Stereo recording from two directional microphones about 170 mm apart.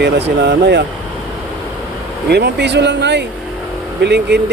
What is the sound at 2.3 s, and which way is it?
Speech, 85° right.